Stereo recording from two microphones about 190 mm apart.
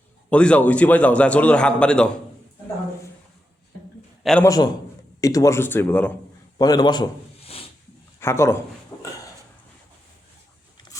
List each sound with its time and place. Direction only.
0.3 s a man's voice: 5° left (ahead or behind)
4.2 s a man's voice: centre (ahead or behind)
4.4 s a man's voice: 20° left (ahead or behind)
6.6 s a man's voice: 20° left (ahead or behind)
8.2 s a sound: 15° left (ahead or behind)